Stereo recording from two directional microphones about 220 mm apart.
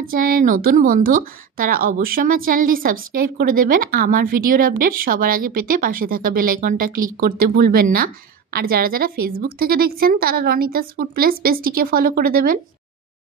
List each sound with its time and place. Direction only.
0.0 s a woman's voice: 40° right (ahead or behind)